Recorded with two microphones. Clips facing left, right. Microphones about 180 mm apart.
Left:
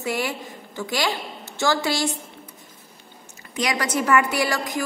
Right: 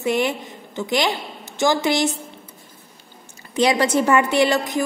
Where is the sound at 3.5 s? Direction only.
30° right (ahead or behind).